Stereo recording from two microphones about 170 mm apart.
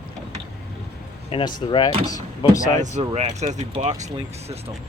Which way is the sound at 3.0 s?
40° right (ahead or behind).